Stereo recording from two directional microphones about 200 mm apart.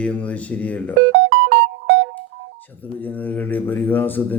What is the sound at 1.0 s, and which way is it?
Keyboard, 60° right (ahead or behind).